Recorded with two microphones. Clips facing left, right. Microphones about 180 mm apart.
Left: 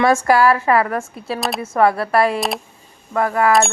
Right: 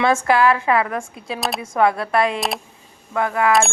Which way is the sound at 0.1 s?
10° left (ahead or behind).